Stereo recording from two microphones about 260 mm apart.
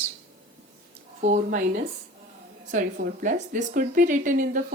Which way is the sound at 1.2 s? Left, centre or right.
Right.